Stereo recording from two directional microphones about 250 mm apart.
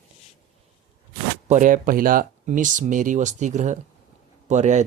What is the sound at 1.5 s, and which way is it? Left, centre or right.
Speech, right.